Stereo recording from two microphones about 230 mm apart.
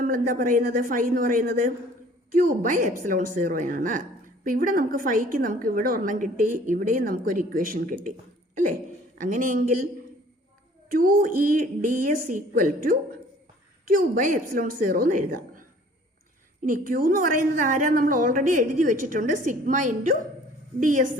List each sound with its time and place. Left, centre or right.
0.0 s a woman's voice: right
9.1 s a woman's voice: right
10.8 s a woman's voice: right
16.6 s a woman's voice: right